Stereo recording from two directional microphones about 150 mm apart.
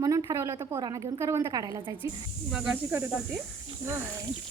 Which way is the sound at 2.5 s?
5° right (ahead or behind).